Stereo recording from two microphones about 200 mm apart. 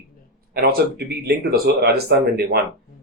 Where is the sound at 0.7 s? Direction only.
50° right (ahead or behind).